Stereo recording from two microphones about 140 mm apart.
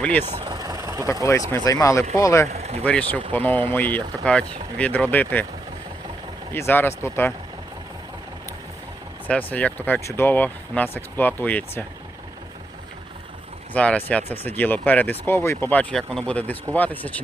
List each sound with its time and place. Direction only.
0.0 s speech: 10° left (ahead or behind)
0.3 s speech: 45° right (ahead or behind)
0.5 s vehicle: 25° right (ahead or behind)
1.2 s speech: 25° left (ahead or behind)
2.5 s speech: 50° right (ahead or behind)
2.8 s speech: 10° left (ahead or behind)
6.5 s speech: 15° left (ahead or behind)
9.2 s speech: 10° left (ahead or behind)
13.7 s speech: 10° left (ahead or behind)